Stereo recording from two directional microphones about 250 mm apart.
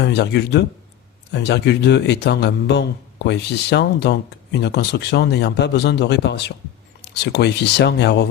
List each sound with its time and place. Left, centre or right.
0.0 s a man's voice: left